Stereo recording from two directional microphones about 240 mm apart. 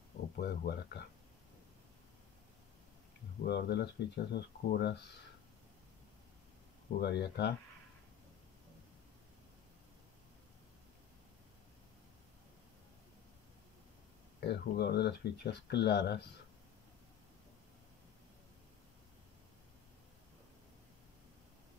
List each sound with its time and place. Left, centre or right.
0.4 s speech: left
3.4 s speech: left
7.0 s speech: left
14.4 s speech: left